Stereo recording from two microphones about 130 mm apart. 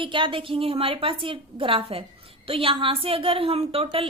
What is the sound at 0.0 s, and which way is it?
A woman's voice, 40° right (ahead or behind).